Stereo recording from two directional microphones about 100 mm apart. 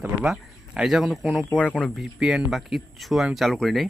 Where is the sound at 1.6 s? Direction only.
10° left (ahead or behind).